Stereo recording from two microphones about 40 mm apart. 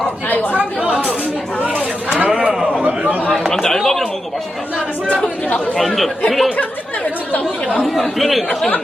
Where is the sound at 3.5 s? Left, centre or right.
Centre.